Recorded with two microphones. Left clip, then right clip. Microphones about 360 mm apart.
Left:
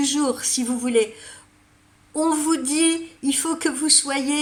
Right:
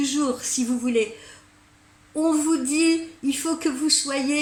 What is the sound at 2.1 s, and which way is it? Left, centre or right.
A woman's voice, left.